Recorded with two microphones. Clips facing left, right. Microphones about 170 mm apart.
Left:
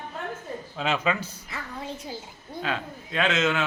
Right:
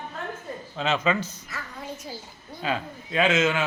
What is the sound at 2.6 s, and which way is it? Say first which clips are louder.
A man's voice: right 3 dB; 5° right (ahead or behind).